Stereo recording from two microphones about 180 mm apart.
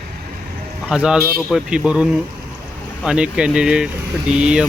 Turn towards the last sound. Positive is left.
turn(degrees=-5)  # may be behind; listen again after turning